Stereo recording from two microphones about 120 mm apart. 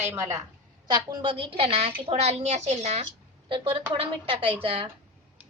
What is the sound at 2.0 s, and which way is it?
A woman's voice, 65° right (ahead or behind).